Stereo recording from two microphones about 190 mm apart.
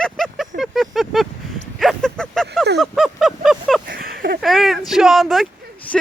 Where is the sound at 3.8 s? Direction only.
50° right (ahead or behind).